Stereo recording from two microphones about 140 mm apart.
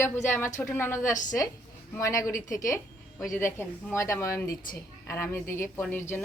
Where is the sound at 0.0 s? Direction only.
15° left (ahead or behind).